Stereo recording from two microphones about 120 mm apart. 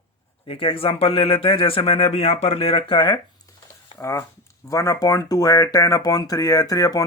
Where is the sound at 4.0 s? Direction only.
25° left (ahead or behind).